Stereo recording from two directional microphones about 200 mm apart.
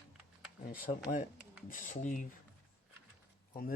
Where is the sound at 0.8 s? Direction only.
40° left (ahead or behind).